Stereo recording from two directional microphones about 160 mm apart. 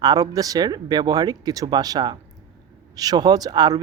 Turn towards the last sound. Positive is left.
turn(degrees=-25)  # may be behind; listen again after turning